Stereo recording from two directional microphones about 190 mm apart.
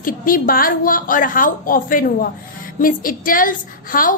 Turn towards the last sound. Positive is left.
turn(degrees=45)  # may be behind; listen again after turning